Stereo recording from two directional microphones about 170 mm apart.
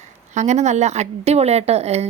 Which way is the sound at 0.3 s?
45° right (ahead or behind).